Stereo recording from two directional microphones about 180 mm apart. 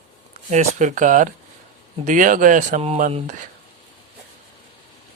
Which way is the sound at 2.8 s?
35° right (ahead or behind).